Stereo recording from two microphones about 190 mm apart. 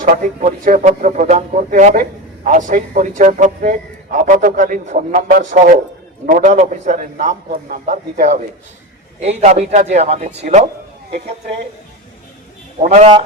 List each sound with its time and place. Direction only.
0.0 s a man's voice: 45° right (ahead or behind)
12.8 s a man's voice: 35° right (ahead or behind)